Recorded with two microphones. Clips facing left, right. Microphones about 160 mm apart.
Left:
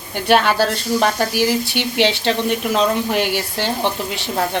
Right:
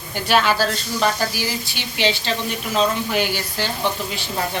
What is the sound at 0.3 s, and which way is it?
Speech, 60° left (ahead or behind).